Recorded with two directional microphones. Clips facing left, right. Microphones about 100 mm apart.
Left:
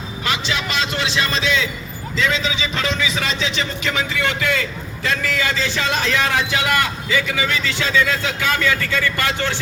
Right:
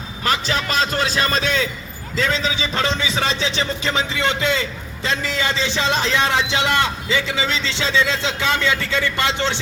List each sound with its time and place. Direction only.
0.3 s a man's voice: 40° right (ahead or behind); by 9.6 s 20° right (ahead or behind)